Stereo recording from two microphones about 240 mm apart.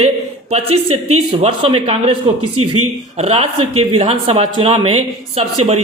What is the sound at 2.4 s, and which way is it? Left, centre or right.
Speech, right.